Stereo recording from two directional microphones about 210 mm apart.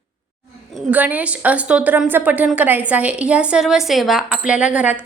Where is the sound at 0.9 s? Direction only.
5° right (ahead or behind).